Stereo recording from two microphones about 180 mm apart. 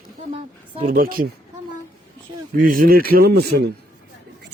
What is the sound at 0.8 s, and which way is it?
Speech, 55° right (ahead or behind).